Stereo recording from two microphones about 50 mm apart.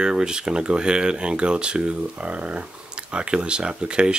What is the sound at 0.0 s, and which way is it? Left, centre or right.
Speech, centre.